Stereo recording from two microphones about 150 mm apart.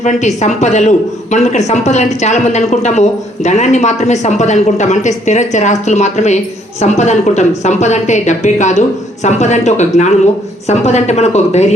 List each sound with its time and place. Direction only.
0.0 s speech: 50° left (ahead or behind)